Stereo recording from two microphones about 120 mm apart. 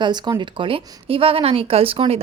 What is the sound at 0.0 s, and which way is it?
A woman's voice, 40° right (ahead or behind).